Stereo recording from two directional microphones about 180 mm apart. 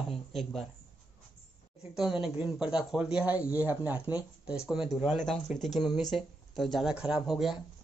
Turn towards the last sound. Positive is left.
turn(degrees=0)  # may be behind; listen again after turning